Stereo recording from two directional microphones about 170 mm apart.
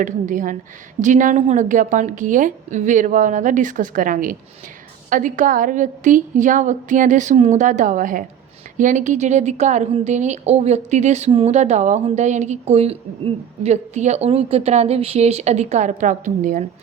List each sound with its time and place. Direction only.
0.0 s a woman's voice: 50° right (ahead or behind)